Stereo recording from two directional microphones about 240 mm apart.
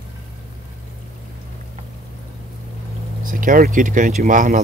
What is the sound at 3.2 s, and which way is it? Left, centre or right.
Speech, right.